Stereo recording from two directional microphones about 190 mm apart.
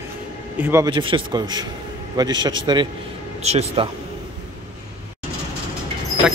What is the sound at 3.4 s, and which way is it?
Speech, 35° right (ahead or behind).